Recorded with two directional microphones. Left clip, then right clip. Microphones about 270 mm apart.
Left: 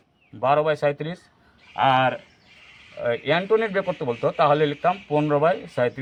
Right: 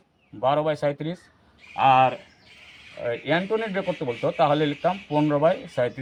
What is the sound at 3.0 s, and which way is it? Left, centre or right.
A man's voice, left.